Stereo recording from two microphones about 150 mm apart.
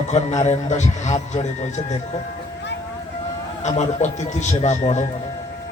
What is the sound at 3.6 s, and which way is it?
A man's voice, 50° left (ahead or behind).